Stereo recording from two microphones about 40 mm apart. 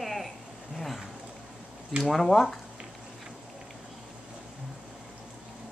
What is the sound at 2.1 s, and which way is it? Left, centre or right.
Speech, centre.